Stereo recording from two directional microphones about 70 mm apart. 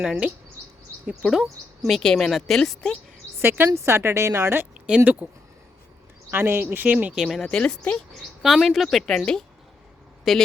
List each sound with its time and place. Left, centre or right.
1.2 s speech: centre
3.4 s speech: right
3.8 s a woman's voice: right
4.9 s speech: centre
6.3 s speech: right
7.2 s speech: centre
7.4 s speech: centre
8.2 s speech: centre
10.3 s speech: centre